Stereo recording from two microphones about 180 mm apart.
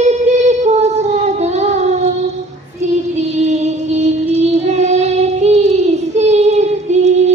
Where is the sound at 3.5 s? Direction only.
40° right (ahead or behind).